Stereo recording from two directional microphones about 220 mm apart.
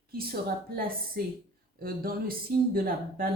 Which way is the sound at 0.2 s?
45° right (ahead or behind).